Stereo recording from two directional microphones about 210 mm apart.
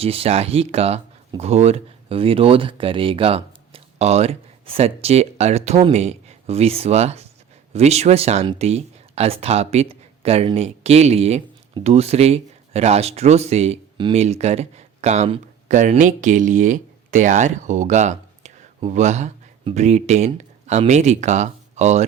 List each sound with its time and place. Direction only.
0.0 s speech: 30° right (ahead or behind)